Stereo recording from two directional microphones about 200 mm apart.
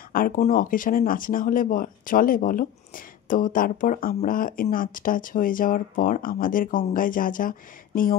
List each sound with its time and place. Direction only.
0.1 s speech: 45° left (ahead or behind)